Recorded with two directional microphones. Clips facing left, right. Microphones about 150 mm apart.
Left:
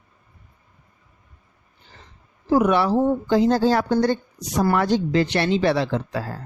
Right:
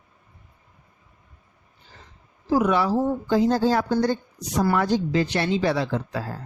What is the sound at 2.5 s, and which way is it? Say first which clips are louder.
Speech: left 3 dB; 60° left (ahead or behind).